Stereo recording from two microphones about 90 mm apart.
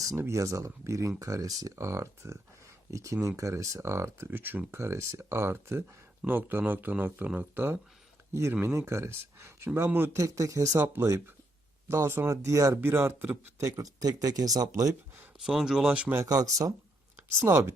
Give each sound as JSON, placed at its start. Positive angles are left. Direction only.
{"t": 0.0, "sound": "speech", "side_deg": -35}
{"t": 10.2, "sound": "speech", "side_deg": -40}
{"t": 10.8, "sound": "speech", "side_deg": -25}
{"t": 12.8, "sound": "speech", "side_deg": -25}
{"t": 13.6, "sound": "speech", "side_deg": -40}
{"t": 15.4, "sound": "speech", "side_deg": -5}
{"t": 16.1, "sound": "speech", "side_deg": -40}
{"t": 17.4, "sound": "speech", "side_deg": -30}